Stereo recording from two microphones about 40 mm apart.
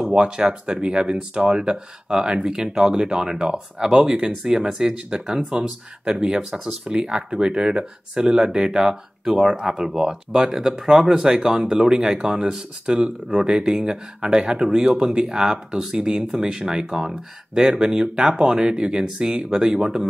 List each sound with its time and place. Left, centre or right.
0.1 s speech: right